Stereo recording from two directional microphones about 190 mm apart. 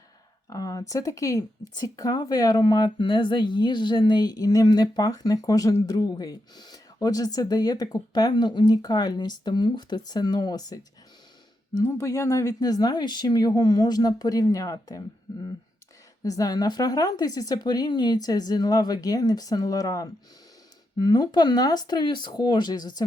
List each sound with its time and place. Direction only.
0.5 s speech: 20° left (ahead or behind)
11.8 s speech: 15° left (ahead or behind)